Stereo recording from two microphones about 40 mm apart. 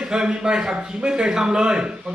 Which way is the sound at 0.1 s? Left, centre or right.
Right.